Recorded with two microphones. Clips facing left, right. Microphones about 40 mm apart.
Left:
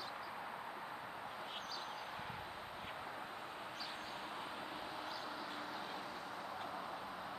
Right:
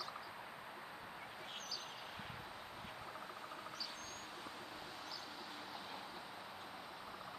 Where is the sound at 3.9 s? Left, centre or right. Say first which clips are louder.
Left 4 dB; left.